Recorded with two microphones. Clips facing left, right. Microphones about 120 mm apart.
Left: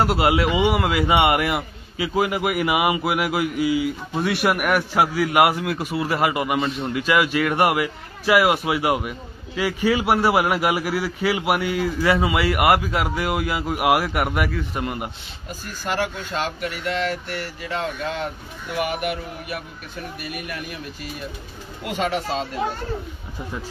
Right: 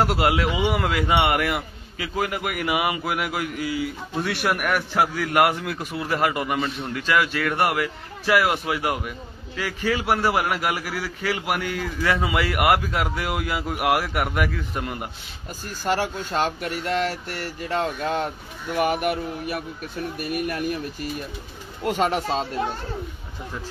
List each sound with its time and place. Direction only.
0.0 s a man's voice: centre (ahead or behind)
15.9 s speech: 40° right (ahead or behind)